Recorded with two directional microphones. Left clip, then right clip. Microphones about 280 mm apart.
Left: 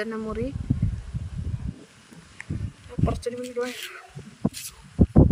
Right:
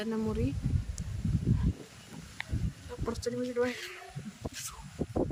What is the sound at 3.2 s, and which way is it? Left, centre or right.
Speech, centre.